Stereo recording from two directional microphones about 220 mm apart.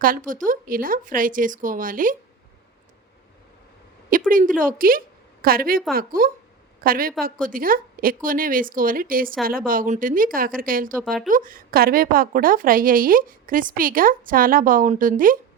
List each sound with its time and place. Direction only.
0.0 s a woman's voice: 40° right (ahead or behind)
4.3 s a woman's voice: 40° right (ahead or behind)